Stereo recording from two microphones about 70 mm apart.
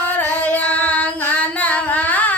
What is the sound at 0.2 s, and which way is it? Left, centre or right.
Singing, left.